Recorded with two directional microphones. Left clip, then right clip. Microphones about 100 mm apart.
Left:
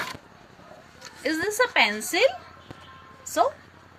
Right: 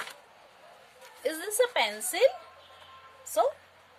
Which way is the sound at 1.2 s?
65° right (ahead or behind).